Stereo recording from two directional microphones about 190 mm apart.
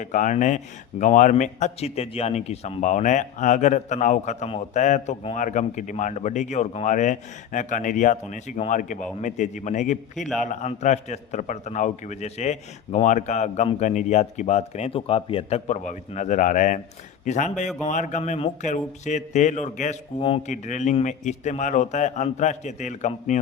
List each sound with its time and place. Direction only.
0.0 s speech: 40° left (ahead or behind)
20.1 s speech: 30° left (ahead or behind)